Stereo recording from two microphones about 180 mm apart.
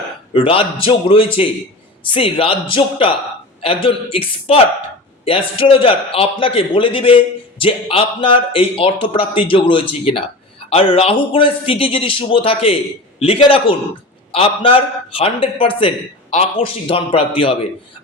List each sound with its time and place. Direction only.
0.3 s a man's voice: 30° left (ahead or behind)